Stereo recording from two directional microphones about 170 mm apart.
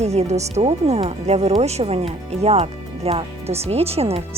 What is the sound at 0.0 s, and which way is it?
Speech, 40° right (ahead or behind).